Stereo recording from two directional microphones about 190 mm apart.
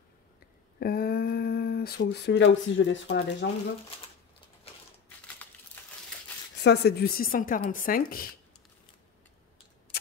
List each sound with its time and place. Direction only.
0.7 s speech: 55° left (ahead or behind)
5.8 s crumpling: 10° left (ahead or behind)
6.6 s speech: 60° left (ahead or behind)